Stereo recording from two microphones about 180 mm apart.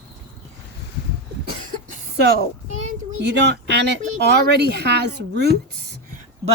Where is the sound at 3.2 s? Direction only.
70° right (ahead or behind).